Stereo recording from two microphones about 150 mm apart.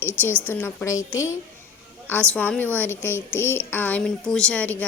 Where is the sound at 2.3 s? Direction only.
10° left (ahead or behind).